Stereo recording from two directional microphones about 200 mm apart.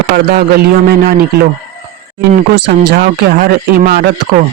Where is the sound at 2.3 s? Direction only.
50° right (ahead or behind).